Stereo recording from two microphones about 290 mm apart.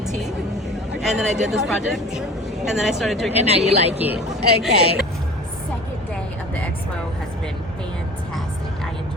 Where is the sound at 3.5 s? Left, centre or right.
Right.